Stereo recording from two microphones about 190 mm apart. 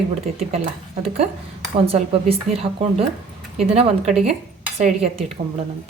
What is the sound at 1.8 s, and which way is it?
A woman's voice, 30° right (ahead or behind).